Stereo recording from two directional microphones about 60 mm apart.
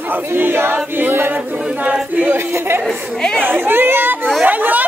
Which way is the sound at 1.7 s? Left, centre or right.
Right.